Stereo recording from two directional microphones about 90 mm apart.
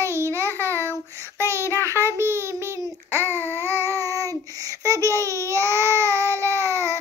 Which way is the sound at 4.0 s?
40° right (ahead or behind).